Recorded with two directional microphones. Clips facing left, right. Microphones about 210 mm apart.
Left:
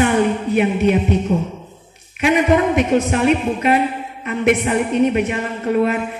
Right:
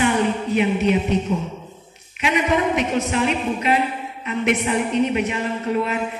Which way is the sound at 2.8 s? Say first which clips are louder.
Left 5 dB; 50° left (ahead or behind).